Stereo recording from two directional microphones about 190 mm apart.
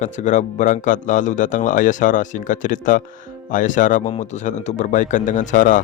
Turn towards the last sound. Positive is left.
turn(degrees=40)  # may be behind; listen again after turning